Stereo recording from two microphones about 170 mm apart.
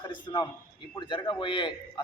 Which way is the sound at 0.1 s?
30° left (ahead or behind).